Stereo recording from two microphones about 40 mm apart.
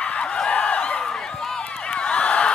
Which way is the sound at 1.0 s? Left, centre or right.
Left.